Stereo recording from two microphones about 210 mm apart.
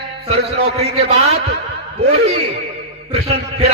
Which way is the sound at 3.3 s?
30° right (ahead or behind).